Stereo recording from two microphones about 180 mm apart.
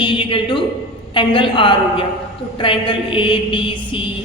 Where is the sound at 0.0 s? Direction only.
30° left (ahead or behind).